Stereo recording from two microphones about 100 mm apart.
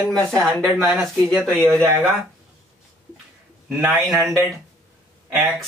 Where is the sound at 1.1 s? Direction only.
5° left (ahead or behind).